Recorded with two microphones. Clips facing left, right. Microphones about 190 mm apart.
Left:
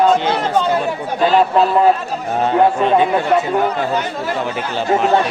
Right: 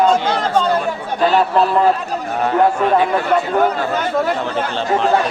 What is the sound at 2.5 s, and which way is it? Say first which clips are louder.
Speech: left 1 dB; 20° left (ahead or behind).